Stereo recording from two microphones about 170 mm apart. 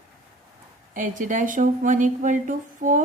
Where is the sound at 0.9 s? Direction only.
50° right (ahead or behind).